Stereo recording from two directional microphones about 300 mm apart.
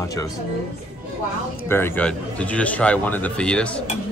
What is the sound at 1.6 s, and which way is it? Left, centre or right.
A man's voice, centre.